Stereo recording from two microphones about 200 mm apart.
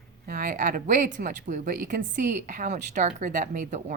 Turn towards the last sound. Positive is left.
turn(degrees=-40)  # may be behind; listen again after turning